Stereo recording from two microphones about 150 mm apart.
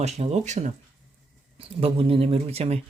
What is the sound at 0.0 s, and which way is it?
Speech, 45° right (ahead or behind).